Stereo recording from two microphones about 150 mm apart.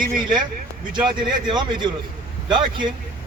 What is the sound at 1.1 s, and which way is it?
Speech, 30° right (ahead or behind).